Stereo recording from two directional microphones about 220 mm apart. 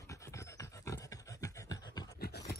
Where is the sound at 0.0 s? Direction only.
15° left (ahead or behind).